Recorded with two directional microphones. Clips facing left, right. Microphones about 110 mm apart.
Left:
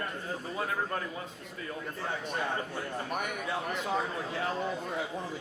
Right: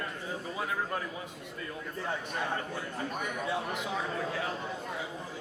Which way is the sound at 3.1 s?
60° left (ahead or behind).